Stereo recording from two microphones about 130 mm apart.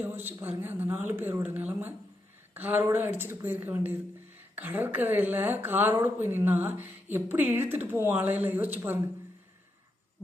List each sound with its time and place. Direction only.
0.0 s a woman's voice: 15° right (ahead or behind)